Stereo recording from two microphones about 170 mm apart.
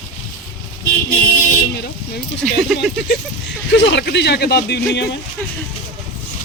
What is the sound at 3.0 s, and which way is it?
Speech, 85° left.